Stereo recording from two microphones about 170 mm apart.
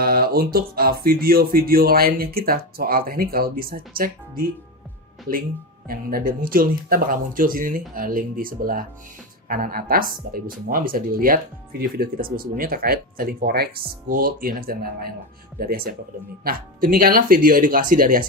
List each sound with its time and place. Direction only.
0.0 s speech: 65° right (ahead or behind)
5.9 s speech: 55° right (ahead or behind)